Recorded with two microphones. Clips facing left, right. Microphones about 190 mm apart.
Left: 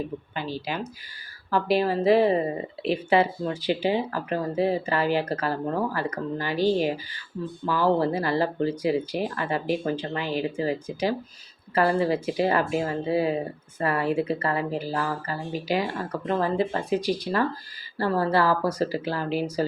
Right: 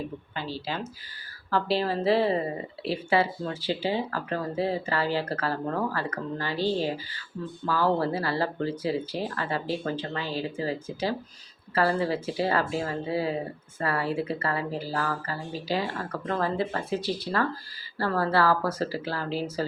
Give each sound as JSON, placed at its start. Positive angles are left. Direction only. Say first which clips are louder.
{"t": 0.3, "sound": "speech", "louder": "left 2 dB", "side_deg": 15}